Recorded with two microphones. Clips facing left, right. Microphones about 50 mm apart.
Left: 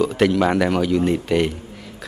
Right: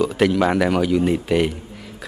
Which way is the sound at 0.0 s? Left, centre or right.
Centre.